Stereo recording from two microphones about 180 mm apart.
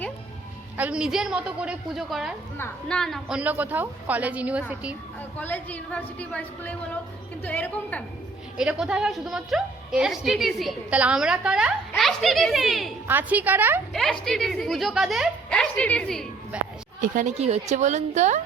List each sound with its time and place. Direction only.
0.8 s a woman's voice: 5° right (ahead or behind)
2.6 s a woman's voice: 10° left (ahead or behind)
5.4 s a woman's voice: 10° left (ahead or behind)
8.5 s a woman's voice: 5° right (ahead or behind)
13.9 s a woman's voice: centre (ahead or behind)
16.5 s a sound: 5° right (ahead or behind)
17.0 s a woman's voice: 45° right (ahead or behind)